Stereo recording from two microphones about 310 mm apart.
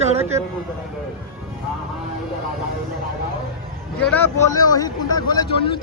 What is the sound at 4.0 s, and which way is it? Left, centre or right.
Speech, centre.